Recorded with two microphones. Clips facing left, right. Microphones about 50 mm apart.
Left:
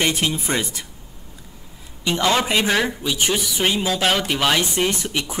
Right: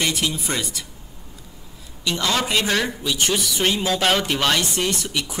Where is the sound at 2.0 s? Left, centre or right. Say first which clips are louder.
Left 3 dB; left.